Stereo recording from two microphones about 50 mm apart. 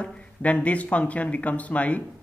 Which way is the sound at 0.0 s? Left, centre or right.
Left.